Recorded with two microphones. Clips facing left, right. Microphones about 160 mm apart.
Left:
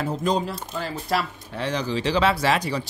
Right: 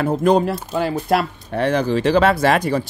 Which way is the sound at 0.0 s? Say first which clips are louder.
Right 8 dB; 60° right (ahead or behind).